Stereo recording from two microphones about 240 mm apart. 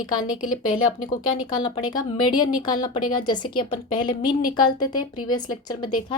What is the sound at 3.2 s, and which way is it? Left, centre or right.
Speech, centre.